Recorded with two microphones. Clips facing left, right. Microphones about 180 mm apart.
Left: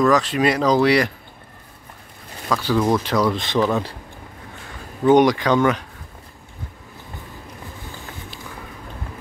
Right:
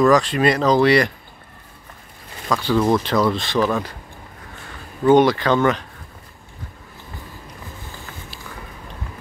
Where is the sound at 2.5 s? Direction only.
10° left (ahead or behind).